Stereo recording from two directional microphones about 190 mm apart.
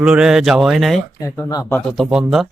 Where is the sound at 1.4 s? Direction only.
20° left (ahead or behind).